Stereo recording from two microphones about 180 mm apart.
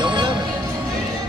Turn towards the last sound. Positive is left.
turn(degrees=-25)  # may be behind; listen again after turning